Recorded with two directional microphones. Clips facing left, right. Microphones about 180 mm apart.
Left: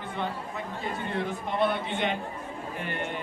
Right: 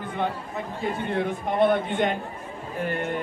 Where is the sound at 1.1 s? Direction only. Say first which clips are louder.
Right 5 dB; 50° right (ahead or behind).